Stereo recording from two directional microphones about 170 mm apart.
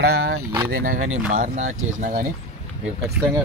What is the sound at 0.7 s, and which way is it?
Speech, 60° right (ahead or behind).